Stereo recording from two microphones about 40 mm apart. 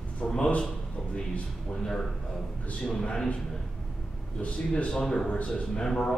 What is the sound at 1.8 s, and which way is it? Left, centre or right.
A man's voice, centre.